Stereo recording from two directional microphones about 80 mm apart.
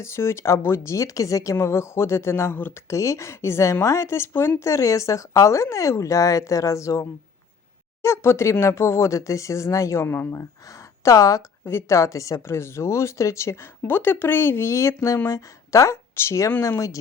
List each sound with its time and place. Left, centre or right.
0.0 s a woman's voice: left
2.9 s a woman's voice: left
11.0 s a woman's voice: left
11.6 s a woman's voice: left